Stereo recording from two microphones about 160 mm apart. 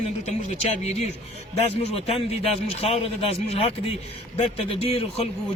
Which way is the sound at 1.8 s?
40° left (ahead or behind).